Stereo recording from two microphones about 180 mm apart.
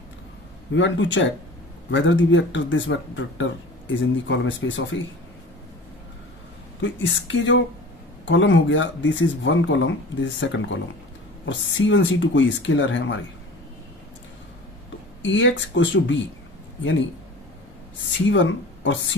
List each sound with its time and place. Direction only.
0.8 s speech: 90° left
6.8 s speech: 90° left
15.2 s speech: 90° left
18.3 s speech: 90° left